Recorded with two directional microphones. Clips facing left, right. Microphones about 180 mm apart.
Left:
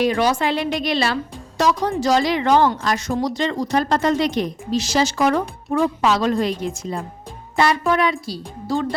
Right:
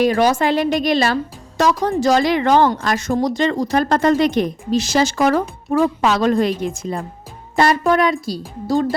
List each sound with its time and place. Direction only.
0.0 s a woman's voice: 45° right (ahead or behind)
7.5 s a woman's voice: 40° right (ahead or behind)